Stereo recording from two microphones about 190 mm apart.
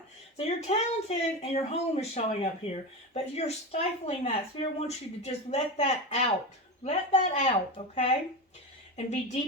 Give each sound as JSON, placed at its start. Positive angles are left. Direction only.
{"t": 0.3, "sound": "speech", "side_deg": 35}